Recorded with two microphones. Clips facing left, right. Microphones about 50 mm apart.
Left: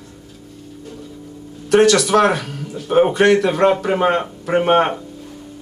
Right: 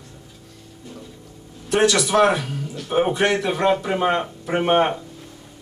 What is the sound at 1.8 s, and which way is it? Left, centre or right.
Speech, left.